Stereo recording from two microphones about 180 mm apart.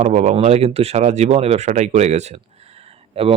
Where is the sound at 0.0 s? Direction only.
40° right (ahead or behind).